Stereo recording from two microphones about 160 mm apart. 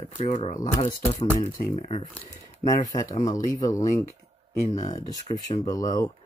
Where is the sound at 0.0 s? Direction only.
45° left (ahead or behind).